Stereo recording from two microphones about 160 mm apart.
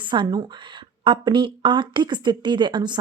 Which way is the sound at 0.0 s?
30° right (ahead or behind).